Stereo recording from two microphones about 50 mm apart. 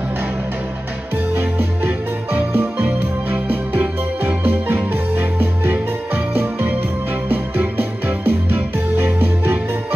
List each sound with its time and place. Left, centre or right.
1.3 s music: right